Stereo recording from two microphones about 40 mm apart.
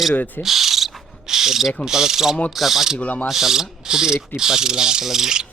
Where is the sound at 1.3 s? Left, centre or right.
Centre.